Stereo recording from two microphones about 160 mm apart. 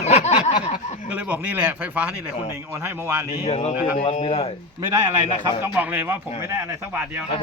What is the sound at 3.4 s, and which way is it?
Speech, 40° left (ahead or behind).